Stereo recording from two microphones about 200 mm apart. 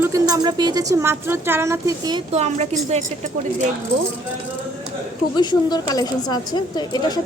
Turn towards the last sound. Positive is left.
turn(degrees=20)  # may be behind; listen again after turning